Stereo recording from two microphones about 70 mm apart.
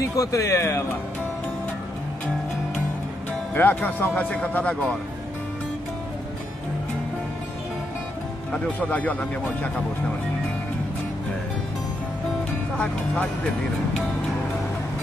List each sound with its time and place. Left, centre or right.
0.0 s speech: left
3.5 s speech: left
8.5 s speech: centre
12.7 s speech: centre